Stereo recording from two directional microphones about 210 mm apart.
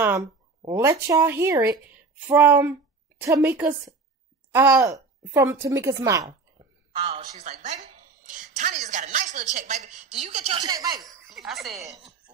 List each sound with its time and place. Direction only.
0.6 s a woman's voice: 15° right (ahead or behind)
6.9 s a woman's voice: 30° right (ahead or behind)
10.6 s a woman's voice: 15° right (ahead or behind)
11.2 s speech: centre (ahead or behind)